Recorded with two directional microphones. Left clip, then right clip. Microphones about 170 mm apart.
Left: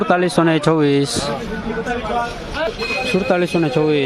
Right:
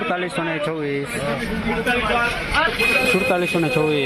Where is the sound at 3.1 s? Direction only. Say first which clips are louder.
Left 1 dB; 25° left (ahead or behind).